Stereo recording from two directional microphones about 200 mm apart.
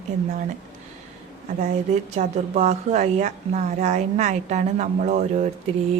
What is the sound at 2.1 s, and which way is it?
A woman's voice, 35° right (ahead or behind).